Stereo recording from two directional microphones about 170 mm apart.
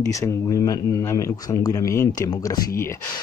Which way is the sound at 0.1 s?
20° left (ahead or behind).